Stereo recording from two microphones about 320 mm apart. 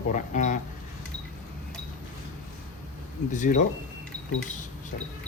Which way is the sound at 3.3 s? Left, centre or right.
Left.